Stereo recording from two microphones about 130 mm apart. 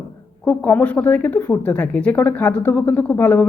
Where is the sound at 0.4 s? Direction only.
10° left (ahead or behind).